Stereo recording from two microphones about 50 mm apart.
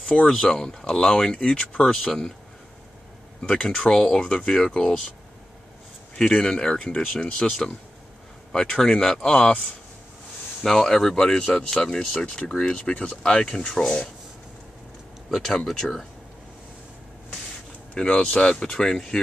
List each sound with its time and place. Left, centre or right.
0.3 s speech: centre
3.4 s speech: centre
6.1 s speech: centre
15.2 s speech: centre
17.9 s speech: left